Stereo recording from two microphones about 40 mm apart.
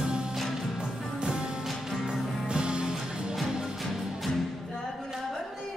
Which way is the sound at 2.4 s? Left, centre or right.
Right.